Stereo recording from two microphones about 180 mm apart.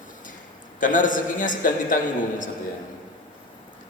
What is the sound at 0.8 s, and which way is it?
A man's voice, 45° left (ahead or behind).